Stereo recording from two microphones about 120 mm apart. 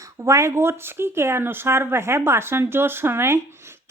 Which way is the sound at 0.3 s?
25° right (ahead or behind).